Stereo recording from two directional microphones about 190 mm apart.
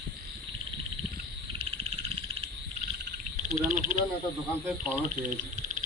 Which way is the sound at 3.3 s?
40° right (ahead or behind).